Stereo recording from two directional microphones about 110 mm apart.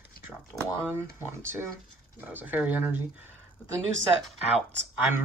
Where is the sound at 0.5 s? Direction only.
30° left (ahead or behind).